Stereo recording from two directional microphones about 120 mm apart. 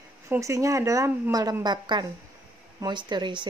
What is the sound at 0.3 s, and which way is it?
A woman's voice, 25° right (ahead or behind).